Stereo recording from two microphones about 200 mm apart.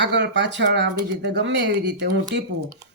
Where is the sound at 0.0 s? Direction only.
60° right (ahead or behind).